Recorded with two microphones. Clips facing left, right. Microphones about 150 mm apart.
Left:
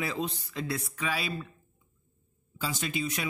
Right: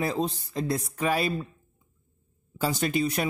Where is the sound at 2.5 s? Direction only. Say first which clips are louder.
Right 7 dB; 45° right (ahead or behind).